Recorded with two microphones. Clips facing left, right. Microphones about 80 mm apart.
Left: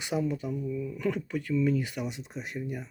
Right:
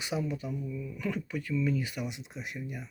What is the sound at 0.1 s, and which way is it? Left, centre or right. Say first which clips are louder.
Speech: left 4 dB; left.